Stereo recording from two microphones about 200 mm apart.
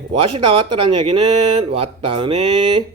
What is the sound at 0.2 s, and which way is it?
Speech, 25° right (ahead or behind).